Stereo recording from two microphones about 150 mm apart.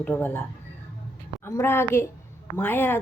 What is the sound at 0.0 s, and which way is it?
Speech, 10° left (ahead or behind).